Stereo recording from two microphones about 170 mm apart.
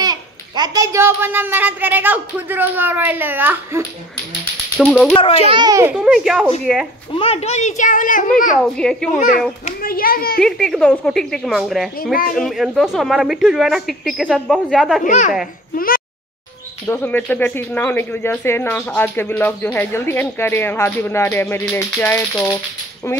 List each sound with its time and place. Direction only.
0.0 s a child's voice: 20° right (ahead or behind)
4.7 s speech: centre (ahead or behind)
5.1 s a child's voice: 30° left (ahead or behind)
5.5 s a child's voice: 25° right (ahead or behind)
5.9 s speech: 5° right (ahead or behind)
7.1 s a woman's voice: 35° left (ahead or behind); by 8.3 s 50° left (ahead or behind)
8.6 s speech: 5° left (ahead or behind)
9.8 s a child's voice: 60° left (ahead or behind)
10.4 s speech: 5° left (ahead or behind)
12.0 s a child's voice: 55° left (ahead or behind)
12.4 s speech: centre (ahead or behind)
15.0 s a woman's voice: 45° left (ahead or behind)
15.7 s speech: 60° left (ahead or behind)
16.8 s speech: 10° left (ahead or behind)